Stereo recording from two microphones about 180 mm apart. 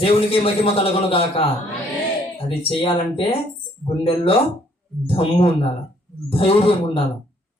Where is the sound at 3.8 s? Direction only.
30° left (ahead or behind).